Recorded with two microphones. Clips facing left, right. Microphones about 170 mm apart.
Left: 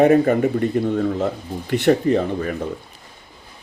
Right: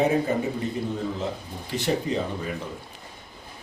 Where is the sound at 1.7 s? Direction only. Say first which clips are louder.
Left 9 dB; 60° left (ahead or behind).